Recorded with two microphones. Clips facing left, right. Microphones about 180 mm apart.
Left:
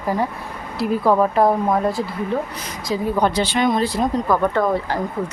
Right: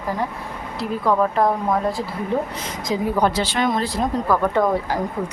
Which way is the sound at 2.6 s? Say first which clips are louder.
Even; 15° right (ahead or behind).